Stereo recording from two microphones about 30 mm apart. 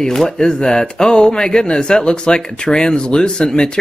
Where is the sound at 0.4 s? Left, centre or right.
Left.